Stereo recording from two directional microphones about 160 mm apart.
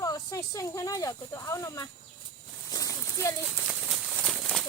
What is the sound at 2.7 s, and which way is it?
Clip-clop, 20° left (ahead or behind).